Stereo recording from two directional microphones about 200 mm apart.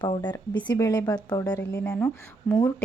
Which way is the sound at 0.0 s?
25° left (ahead or behind).